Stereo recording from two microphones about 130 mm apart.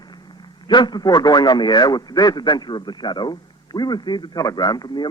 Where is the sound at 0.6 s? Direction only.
35° left (ahead or behind).